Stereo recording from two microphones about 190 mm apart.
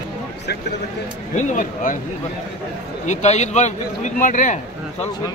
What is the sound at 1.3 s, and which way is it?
Speech, 45° left (ahead or behind).